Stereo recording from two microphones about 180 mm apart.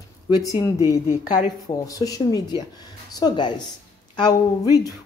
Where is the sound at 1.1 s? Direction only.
45° left (ahead or behind).